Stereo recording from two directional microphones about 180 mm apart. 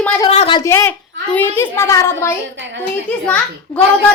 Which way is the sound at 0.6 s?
15° left (ahead or behind).